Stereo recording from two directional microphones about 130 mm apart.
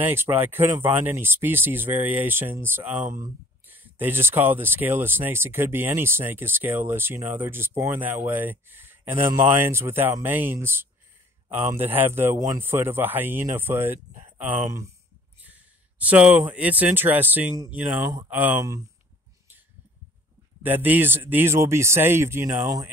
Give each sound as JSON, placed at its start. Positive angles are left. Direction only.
{"t": 0.0, "sound": "speech", "side_deg": -15}
{"t": 15.4, "sound": "speech", "side_deg": -10}
{"t": 20.6, "sound": "speech", "side_deg": -15}